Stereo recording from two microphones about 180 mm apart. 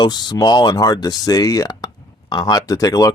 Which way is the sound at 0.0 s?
25° left (ahead or behind).